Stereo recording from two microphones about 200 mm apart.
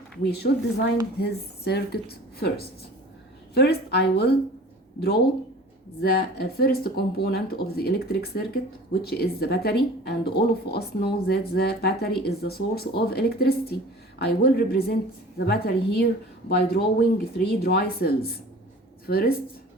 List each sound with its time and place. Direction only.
0.3 s a woman's voice: 55° left (ahead or behind)
6.0 s speech: 50° left (ahead or behind)